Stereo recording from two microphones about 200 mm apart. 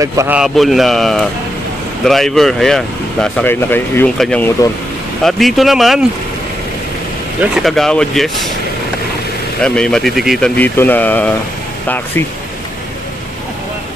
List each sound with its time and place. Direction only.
0.0 s speech: 15° right (ahead or behind)
0.4 s speech: centre (ahead or behind)
7.5 s speech: centre (ahead or behind)
9.6 s speech: 5° left (ahead or behind)